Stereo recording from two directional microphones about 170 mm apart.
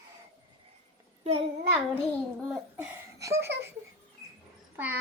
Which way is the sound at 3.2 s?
15° right (ahead or behind).